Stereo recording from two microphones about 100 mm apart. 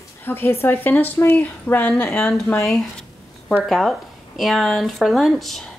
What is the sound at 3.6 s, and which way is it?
Speech, centre (ahead or behind).